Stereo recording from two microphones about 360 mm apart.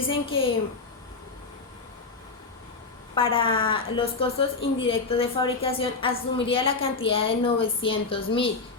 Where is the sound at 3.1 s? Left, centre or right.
Centre.